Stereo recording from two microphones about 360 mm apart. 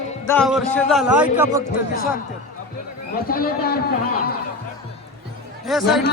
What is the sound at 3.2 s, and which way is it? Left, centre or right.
Speech, left.